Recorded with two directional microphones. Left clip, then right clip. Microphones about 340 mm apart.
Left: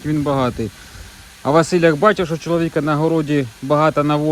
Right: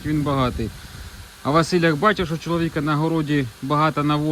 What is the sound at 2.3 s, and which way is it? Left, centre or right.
Speech, left.